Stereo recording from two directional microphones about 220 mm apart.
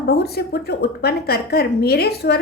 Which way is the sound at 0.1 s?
45° left (ahead or behind).